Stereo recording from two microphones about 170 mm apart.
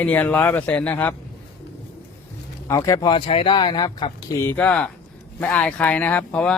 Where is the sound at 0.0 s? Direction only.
10° left (ahead or behind).